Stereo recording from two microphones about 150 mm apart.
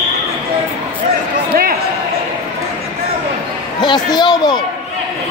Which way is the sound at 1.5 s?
80° right.